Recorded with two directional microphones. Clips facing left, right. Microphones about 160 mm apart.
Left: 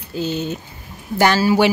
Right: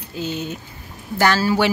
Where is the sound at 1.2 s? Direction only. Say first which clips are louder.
Left 3 dB; 15° left (ahead or behind).